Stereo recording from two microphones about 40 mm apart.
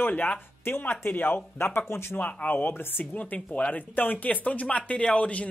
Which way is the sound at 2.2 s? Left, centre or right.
Left.